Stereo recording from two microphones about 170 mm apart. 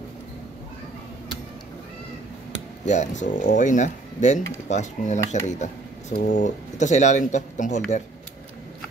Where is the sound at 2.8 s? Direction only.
45° left (ahead or behind).